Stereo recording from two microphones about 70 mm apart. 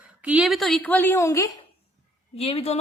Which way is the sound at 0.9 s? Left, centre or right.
Left.